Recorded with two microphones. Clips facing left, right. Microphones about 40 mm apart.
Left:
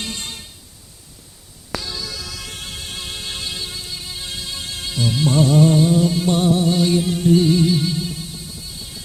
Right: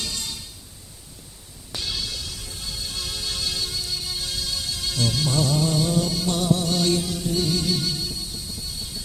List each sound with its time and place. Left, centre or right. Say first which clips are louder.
0.0 s music: left 3 dB; left
2.6 s music: left 2 dB; left
3.0 s music: even; left
4.9 s speech: left 3 dB; centre
5.2 s music: left 10 dB; left
5.8 s music: left 7 dB; centre
7.0 s music: left 9 dB; left